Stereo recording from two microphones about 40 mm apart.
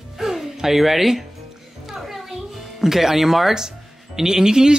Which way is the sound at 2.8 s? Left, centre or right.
Centre.